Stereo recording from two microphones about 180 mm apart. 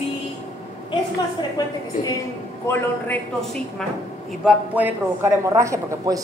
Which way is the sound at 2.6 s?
15° left (ahead or behind).